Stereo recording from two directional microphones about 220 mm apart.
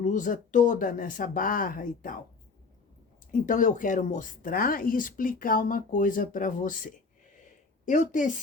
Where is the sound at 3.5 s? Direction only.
35° left (ahead or behind).